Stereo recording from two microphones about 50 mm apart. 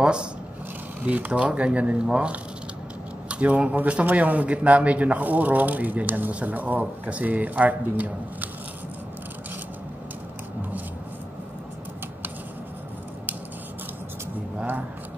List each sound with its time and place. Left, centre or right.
0.0 s speech: centre
1.0 s a man's voice: right